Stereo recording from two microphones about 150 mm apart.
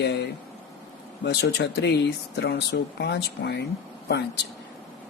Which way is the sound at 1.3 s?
90° left.